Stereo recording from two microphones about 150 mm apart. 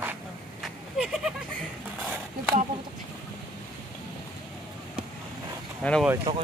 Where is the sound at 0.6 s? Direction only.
5° right (ahead or behind).